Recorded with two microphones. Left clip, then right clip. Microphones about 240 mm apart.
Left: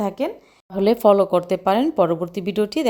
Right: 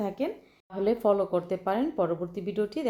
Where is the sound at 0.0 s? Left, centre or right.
Left.